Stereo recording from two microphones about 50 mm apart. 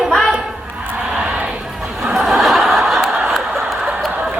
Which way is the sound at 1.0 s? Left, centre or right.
Centre.